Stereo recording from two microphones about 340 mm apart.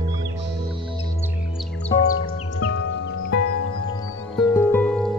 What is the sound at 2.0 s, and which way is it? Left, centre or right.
Music, left.